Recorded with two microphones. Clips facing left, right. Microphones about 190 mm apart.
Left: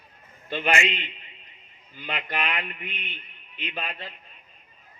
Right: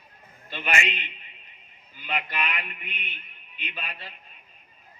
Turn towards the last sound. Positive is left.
turn(degrees=50)  # may be behind; listen again after turning